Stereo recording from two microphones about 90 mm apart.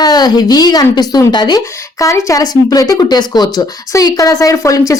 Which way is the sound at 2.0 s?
35° left (ahead or behind).